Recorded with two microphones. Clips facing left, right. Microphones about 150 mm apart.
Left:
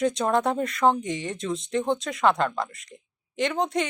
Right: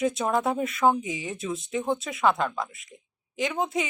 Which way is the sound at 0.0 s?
5° right (ahead or behind).